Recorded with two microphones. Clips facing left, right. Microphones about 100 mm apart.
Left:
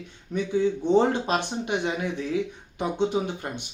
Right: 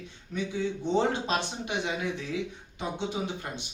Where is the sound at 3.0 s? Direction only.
50° left (ahead or behind).